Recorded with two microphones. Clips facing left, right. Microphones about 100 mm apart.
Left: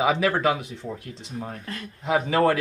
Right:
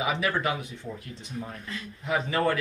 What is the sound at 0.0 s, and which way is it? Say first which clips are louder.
Speech: left 6 dB; 90° left.